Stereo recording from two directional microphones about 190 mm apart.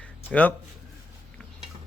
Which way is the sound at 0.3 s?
10° left (ahead or behind).